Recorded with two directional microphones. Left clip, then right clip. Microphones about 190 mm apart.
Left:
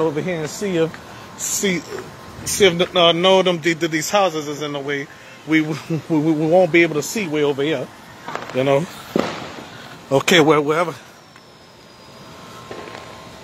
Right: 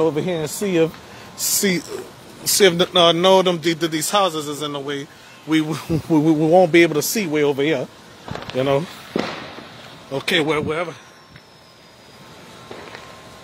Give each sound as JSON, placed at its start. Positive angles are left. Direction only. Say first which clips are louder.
{"t": 0.0, "sound": "speech", "louder": "right 1 dB", "side_deg": -50}
{"t": 4.7, "sound": "speech", "louder": "left 3 dB", "side_deg": -15}
{"t": 5.8, "sound": "speech", "louder": "right 2 dB", "side_deg": -40}
{"t": 8.5, "sound": "speech", "louder": "left 2 dB", "side_deg": -5}
{"t": 10.1, "sound": "speech", "louder": "left 6 dB", "side_deg": 30}
{"t": 10.4, "sound": "speech", "louder": "left 6 dB", "side_deg": 20}